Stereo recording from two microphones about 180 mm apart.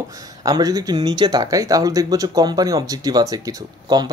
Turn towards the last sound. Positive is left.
turn(degrees=-20)  # may be behind; listen again after turning